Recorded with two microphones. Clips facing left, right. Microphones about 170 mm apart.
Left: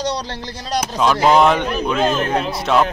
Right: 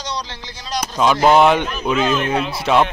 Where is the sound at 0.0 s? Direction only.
65° left (ahead or behind).